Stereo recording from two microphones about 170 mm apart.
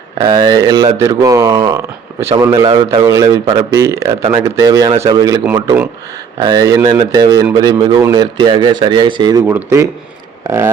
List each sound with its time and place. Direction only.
0.2 s speech: 25° right (ahead or behind)
2.6 s a man's voice: 30° right (ahead or behind)
3.0 s speech: 20° right (ahead or behind)
6.4 s speech: 20° right (ahead or behind)
9.5 s speech: 15° right (ahead or behind)